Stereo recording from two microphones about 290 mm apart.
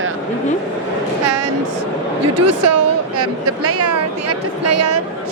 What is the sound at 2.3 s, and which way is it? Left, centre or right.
Speech, right.